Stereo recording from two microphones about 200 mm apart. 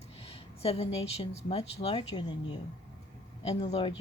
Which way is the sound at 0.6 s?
30° left (ahead or behind).